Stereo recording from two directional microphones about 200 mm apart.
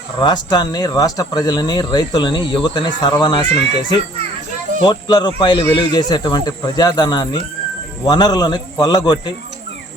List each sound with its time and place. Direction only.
0.2 s speech: 20° left (ahead or behind)